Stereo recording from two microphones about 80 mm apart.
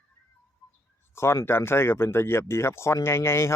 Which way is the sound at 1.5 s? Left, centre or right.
Left.